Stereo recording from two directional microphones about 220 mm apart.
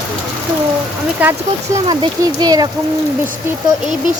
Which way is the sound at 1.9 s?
20° right (ahead or behind).